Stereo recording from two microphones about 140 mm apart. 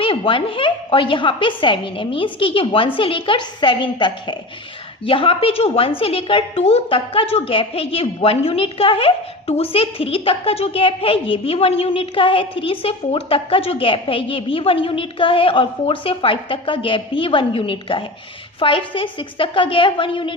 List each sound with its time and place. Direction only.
0.0 s a woman's voice: 40° left (ahead or behind)